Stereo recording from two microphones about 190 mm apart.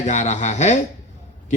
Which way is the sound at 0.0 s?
40° left (ahead or behind).